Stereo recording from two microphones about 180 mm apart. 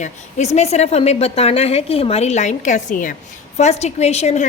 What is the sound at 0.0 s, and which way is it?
A woman's voice, 40° left (ahead or behind).